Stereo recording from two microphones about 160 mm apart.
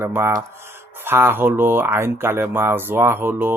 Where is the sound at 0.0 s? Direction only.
15° right (ahead or behind).